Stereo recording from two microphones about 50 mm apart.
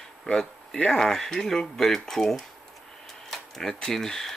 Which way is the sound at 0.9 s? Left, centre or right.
Centre.